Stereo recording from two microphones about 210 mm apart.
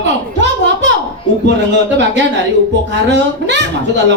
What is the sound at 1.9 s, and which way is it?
Speech, 60° right (ahead or behind).